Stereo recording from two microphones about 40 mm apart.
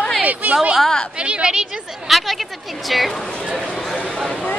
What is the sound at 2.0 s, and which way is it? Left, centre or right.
A woman's voice, centre.